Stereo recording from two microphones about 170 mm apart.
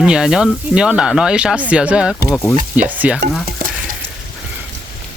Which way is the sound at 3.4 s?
55° right (ahead or behind).